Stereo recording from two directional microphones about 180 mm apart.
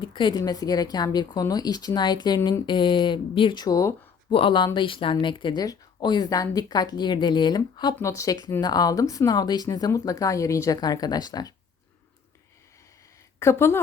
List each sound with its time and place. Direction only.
0.0 s a woman's voice: 25° left (ahead or behind)
13.4 s a woman's voice: 15° left (ahead or behind)